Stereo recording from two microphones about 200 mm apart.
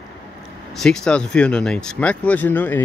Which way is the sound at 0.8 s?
5° left (ahead or behind).